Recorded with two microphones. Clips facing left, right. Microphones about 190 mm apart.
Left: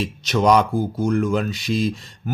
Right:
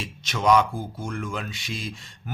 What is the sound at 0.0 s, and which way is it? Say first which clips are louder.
Speech: left 6 dB; 40° left (ahead or behind).